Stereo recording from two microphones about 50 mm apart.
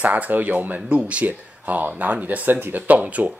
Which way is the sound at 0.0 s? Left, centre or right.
Right.